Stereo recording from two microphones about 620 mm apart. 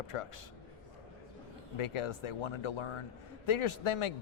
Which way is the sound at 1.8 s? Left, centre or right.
Left.